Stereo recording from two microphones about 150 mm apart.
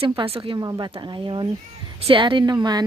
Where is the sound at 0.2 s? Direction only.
35° right (ahead or behind).